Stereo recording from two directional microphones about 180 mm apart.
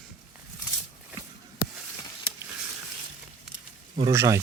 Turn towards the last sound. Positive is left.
turn(degrees=-15)  # may be behind; listen again after turning